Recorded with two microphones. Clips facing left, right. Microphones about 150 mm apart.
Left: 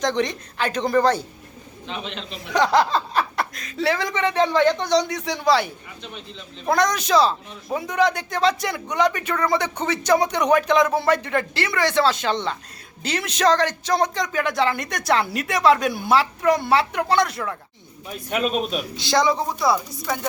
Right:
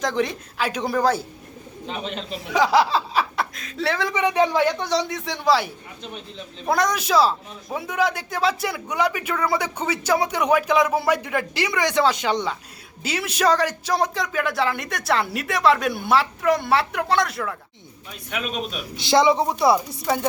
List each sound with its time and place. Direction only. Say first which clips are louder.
0.0 s a man's voice: left 1 dB; 5° right (ahead or behind)
1.9 s a man's voice: right 2 dB; 45° right (ahead or behind)
2.3 s speech: even; 5° right (ahead or behind)
4.2 s a man's voice: even; 10° right (ahead or behind)
18.3 s a man's voice: left 6 dB; 40° left (ahead or behind)
19.0 s speech: right 3 dB; 25° right (ahead or behind)